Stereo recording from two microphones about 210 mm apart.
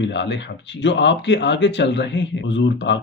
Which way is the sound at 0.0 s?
55° left (ahead or behind).